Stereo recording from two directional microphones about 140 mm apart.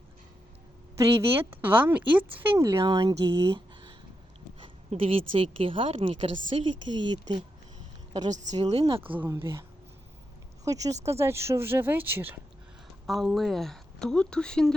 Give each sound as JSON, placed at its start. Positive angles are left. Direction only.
{"t": 1.4, "sound": "speech", "side_deg": -15}
{"t": 8.3, "sound": "a woman's voice", "side_deg": -60}
{"t": 9.0, "sound": "speech", "side_deg": -15}
{"t": 13.1, "sound": "speech", "side_deg": 0}